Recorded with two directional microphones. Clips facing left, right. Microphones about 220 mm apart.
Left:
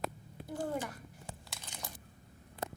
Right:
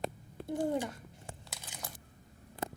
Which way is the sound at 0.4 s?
20° right (ahead or behind).